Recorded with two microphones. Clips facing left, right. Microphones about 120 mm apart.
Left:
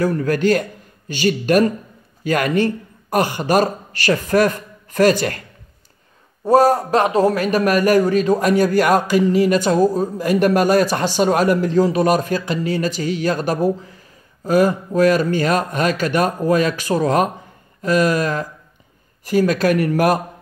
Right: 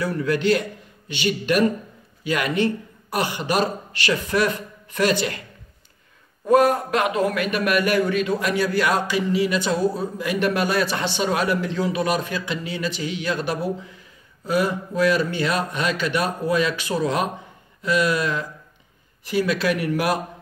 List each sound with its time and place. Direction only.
0.0 s a man's voice: 45° left (ahead or behind)
6.4 s a man's voice: 35° left (ahead or behind)